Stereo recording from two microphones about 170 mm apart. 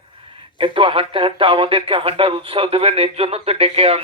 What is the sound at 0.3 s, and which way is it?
Speech, 30° right (ahead or behind).